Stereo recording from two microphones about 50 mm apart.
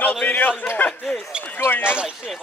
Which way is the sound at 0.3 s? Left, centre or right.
Left.